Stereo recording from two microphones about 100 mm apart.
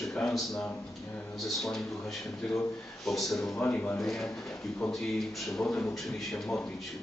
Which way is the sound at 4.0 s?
5° left (ahead or behind).